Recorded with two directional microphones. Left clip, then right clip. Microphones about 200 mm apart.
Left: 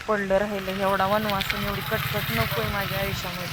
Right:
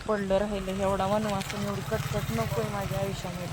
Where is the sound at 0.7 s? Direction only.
5° left (ahead or behind).